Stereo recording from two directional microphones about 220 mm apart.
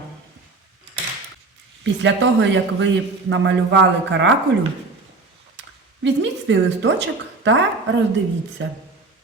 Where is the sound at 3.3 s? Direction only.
55° right (ahead or behind).